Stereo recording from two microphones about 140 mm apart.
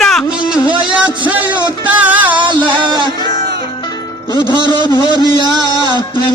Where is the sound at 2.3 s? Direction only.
35° right (ahead or behind).